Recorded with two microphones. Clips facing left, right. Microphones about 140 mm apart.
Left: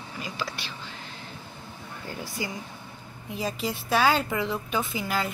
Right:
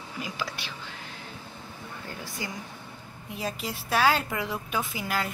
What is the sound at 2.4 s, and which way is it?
A woman's voice, 10° left (ahead or behind).